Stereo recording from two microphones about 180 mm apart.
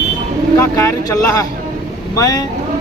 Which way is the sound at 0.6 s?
15° left (ahead or behind).